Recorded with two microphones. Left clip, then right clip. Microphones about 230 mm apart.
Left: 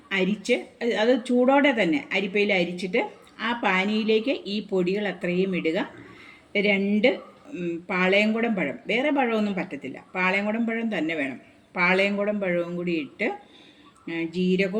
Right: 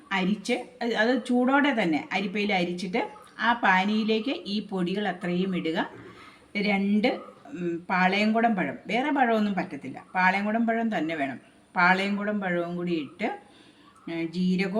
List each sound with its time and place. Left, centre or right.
0.1 s speech: centre